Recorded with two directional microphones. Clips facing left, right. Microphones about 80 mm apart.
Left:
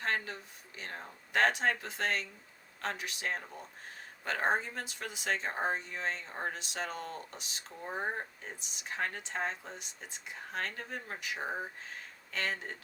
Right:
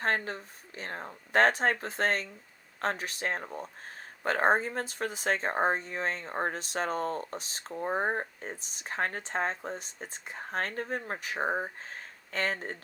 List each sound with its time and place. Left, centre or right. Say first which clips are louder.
0.0 s speech: right 5 dB; right